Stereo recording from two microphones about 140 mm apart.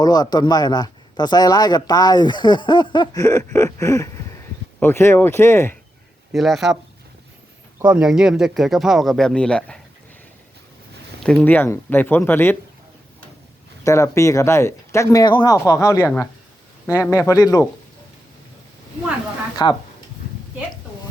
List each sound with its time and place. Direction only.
0.0 s speech: 30° left (ahead or behind)
6.3 s speech: centre (ahead or behind)
7.9 s speech: 5° right (ahead or behind)
11.2 s speech: 5° left (ahead or behind)
13.8 s speech: 20° left (ahead or behind)
17.1 s speech: 20° left (ahead or behind)